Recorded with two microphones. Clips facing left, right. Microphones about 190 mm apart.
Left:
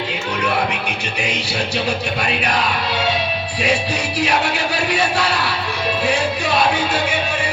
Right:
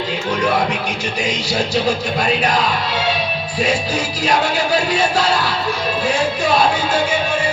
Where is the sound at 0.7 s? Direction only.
60° left (ahead or behind).